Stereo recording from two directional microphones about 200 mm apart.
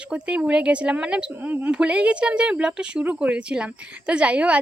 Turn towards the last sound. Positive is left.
turn(degrees=-5)  # may be behind; listen again after turning